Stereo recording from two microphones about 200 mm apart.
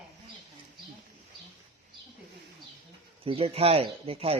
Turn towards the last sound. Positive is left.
turn(degrees=-30)  # may be behind; listen again after turning